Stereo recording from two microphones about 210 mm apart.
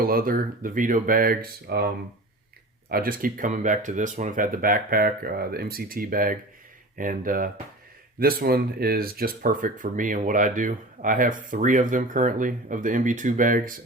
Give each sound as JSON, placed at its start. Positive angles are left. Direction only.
{"t": 0.0, "sound": "speech", "side_deg": -45}
{"t": 2.9, "sound": "speech", "side_deg": -45}